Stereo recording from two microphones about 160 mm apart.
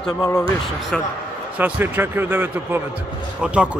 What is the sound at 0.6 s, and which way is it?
Speech, centre (ahead or behind).